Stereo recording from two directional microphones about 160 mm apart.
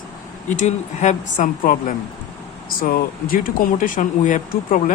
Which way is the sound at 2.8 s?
60° left (ahead or behind).